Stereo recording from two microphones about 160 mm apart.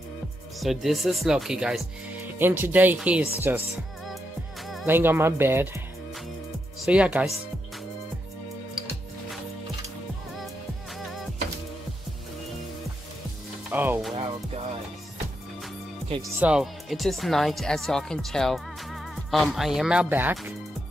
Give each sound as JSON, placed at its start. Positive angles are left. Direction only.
{"t": 0.6, "sound": "speech", "side_deg": 0}
{"t": 4.8, "sound": "speech", "side_deg": -15}
{"t": 6.8, "sound": "speech", "side_deg": -5}
{"t": 13.7, "sound": "music", "side_deg": -10}
{"t": 14.1, "sound": "music", "side_deg": -35}
{"t": 16.3, "sound": "speech", "side_deg": -5}